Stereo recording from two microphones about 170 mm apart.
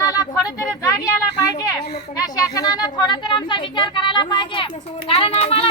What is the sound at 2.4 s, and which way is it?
A child's voice, 20° left (ahead or behind).